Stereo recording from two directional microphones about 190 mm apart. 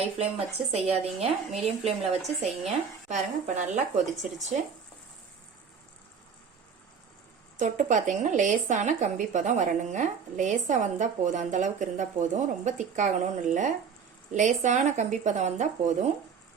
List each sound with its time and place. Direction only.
0.0 s speech: 35° right (ahead or behind)
7.5 s speech: 40° right (ahead or behind)